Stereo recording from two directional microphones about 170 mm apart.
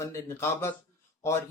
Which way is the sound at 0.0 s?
15° left (ahead or behind).